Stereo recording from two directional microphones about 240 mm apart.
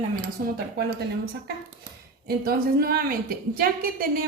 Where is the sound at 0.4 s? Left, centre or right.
Right.